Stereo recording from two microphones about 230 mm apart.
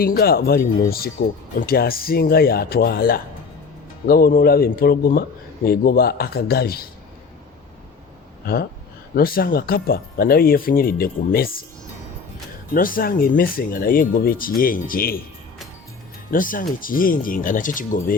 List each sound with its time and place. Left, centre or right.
0.0 s speech: left
9.1 s speech: left
12.7 s speech: left
16.3 s speech: left